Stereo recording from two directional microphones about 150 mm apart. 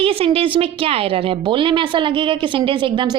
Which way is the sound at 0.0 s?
40° right (ahead or behind).